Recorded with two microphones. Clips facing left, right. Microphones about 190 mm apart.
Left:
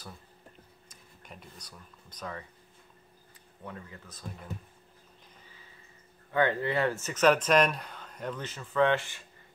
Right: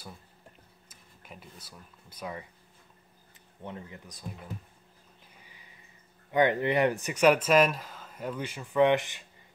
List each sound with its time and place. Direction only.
0.8 s speech: 5° right (ahead or behind)
3.6 s speech: 20° right (ahead or behind)
5.4 s a sound: 15° right (ahead or behind)
6.3 s speech: 15° right (ahead or behind)